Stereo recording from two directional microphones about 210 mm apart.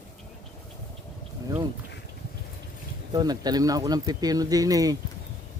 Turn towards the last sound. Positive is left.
turn(degrees=-15)  # may be behind; listen again after turning